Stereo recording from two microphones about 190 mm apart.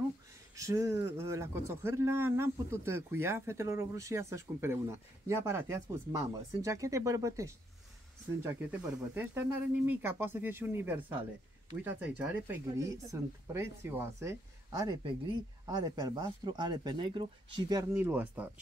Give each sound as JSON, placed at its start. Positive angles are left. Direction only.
{"t": 0.6, "sound": "a man's voice", "side_deg": -15}
{"t": 12.2, "sound": "speech", "side_deg": -15}
{"t": 18.0, "sound": "a man's voice", "side_deg": -10}